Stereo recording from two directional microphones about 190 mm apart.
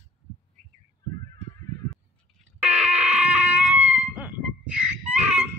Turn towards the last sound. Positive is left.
turn(degrees=-5)  # may be behind; listen again after turning